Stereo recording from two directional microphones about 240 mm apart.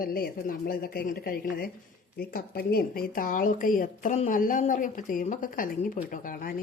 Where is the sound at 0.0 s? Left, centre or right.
Left.